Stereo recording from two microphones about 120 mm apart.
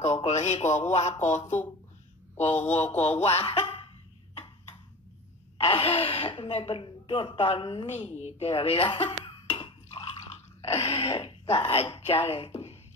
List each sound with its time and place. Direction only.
0.0 s speech: 70° left (ahead or behind)
3.4 s a sound: 40° left (ahead or behind)
5.6 s speech: 50° left (ahead or behind)
8.5 s chink: 50° left (ahead or behind)
10.3 s a sound: 60° left (ahead or behind)
11.1 s speech: 50° left (ahead or behind)